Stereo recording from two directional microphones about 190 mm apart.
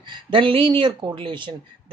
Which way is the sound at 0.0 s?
25° right (ahead or behind).